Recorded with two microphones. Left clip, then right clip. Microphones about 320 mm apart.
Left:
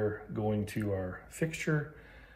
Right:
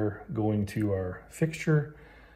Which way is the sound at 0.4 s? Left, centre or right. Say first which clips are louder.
Right 5 dB; right.